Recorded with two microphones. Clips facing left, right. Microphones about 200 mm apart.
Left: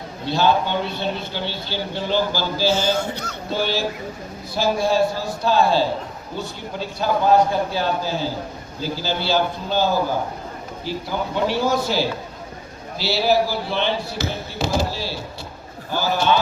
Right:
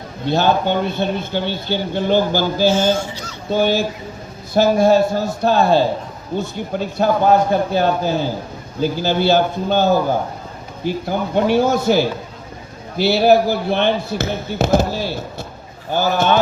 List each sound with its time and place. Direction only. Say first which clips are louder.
0.3 s a man's voice: right 3 dB; 50° right (ahead or behind)
2.9 s speech: right 2 dB; 60° left (ahead or behind)
3.5 s a man's voice: right 6 dB; 50° right (ahead or behind)
7.0 s a man's voice: right 2 dB; 50° right (ahead or behind)
11.4 s a man's voice: right 6 dB; 50° right (ahead or behind)